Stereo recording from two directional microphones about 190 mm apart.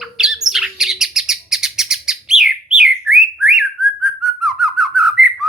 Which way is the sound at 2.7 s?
5° right (ahead or behind).